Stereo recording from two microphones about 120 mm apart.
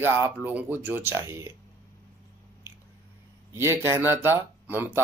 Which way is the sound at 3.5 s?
20° right (ahead or behind).